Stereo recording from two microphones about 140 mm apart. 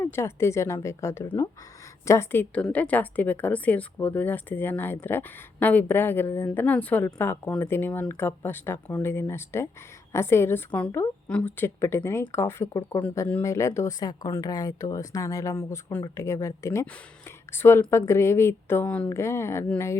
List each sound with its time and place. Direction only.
0.0 s a woman's voice: 20° left (ahead or behind)